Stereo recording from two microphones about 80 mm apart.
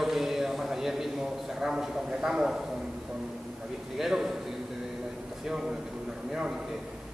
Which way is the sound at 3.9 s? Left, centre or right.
Centre.